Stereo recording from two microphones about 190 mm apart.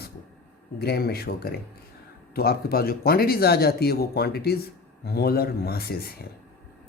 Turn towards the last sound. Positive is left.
turn(degrees=55)  # may be behind; listen again after turning